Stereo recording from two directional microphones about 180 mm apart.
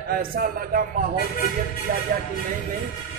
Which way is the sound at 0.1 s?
55° right (ahead or behind).